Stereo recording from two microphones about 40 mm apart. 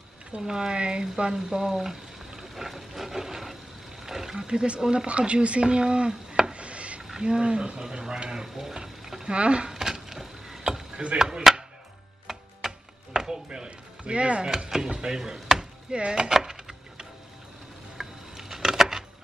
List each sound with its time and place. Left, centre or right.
0.4 s speech: centre
4.0 s a sound: centre
4.4 s speech: right
6.5 s a sound: right
7.0 s speech: centre
9.3 s a sound: right; by 10.6 s centre
10.6 s chop: centre
11.1 s speech: centre
12.3 s chopping: centre
13.7 s speech: right
14.9 s speech: centre
15.9 s a sound: right